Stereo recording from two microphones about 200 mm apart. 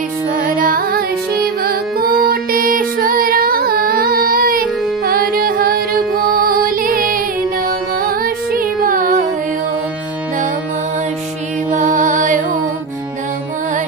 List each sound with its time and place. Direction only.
0.4 s music: 45° right (ahead or behind)
11.7 s mantra: 40° right (ahead or behind)